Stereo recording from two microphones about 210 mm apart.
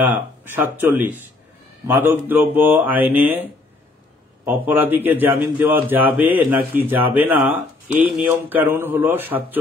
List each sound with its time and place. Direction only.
0.0 s a man's voice: 10° right (ahead or behind)
4.5 s a man's voice: 10° right (ahead or behind)